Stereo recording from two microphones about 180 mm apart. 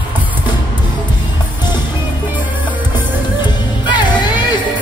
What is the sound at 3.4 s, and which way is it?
Music, 25° left (ahead or behind).